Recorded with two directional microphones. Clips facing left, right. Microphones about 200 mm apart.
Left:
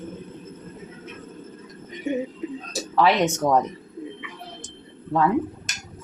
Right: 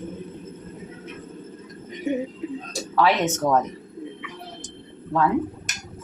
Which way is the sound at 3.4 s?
10° left (ahead or behind).